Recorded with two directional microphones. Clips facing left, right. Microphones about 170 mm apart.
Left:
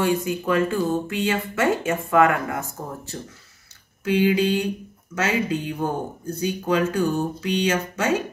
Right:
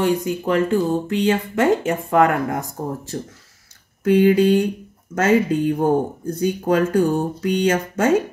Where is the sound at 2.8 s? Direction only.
30° right (ahead or behind).